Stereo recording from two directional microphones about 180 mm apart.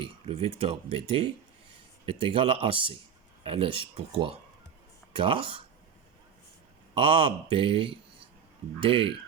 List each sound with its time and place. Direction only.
0.0 s speech: 30° right (ahead or behind)
6.9 s speech: 30° right (ahead or behind)